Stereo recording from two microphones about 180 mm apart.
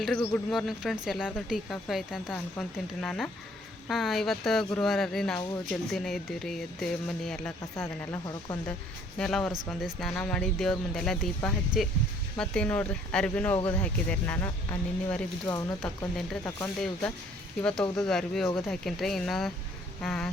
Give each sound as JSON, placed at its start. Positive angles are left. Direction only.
{"t": 0.0, "sound": "a woman's voice", "side_deg": 0}
{"t": 8.1, "sound": "speech", "side_deg": 20}
{"t": 9.1, "sound": "a woman's voice", "side_deg": 5}
{"t": 15.4, "sound": "speech", "side_deg": 20}
{"t": 15.8, "sound": "a woman's voice", "side_deg": 0}
{"t": 17.6, "sound": "a woman's voice", "side_deg": 5}